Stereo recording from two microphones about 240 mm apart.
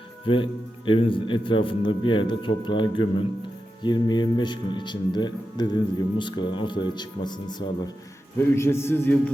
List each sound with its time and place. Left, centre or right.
0.9 s a man's voice: left